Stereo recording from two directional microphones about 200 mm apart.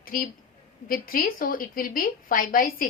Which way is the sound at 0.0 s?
45° left (ahead or behind).